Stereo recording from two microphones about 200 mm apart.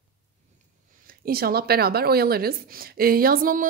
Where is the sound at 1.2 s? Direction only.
50° right (ahead or behind).